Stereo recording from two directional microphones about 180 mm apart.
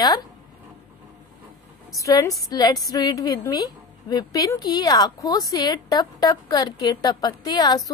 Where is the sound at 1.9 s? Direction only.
20° left (ahead or behind).